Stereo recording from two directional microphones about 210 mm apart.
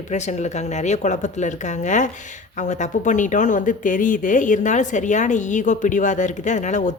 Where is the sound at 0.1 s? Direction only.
35° left (ahead or behind).